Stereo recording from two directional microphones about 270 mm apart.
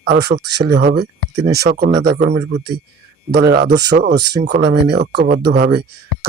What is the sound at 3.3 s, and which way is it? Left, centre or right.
Speech, right.